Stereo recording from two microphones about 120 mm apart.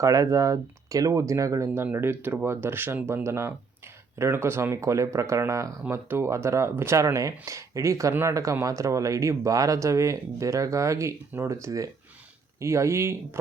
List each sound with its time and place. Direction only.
0.0 s speech: 30° right (ahead or behind)